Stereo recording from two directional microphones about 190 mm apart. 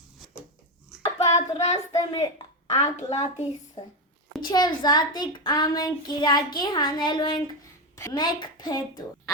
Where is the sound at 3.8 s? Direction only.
35° left (ahead or behind).